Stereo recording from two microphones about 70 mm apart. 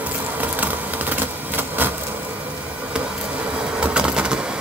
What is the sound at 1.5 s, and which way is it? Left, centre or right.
Vehicle, right.